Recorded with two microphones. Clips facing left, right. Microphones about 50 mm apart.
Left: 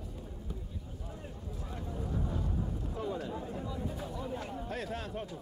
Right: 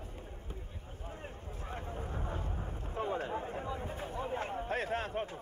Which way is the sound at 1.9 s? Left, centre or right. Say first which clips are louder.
Left 6 dB; right.